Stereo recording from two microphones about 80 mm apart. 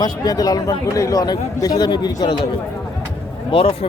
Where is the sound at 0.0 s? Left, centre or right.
Left.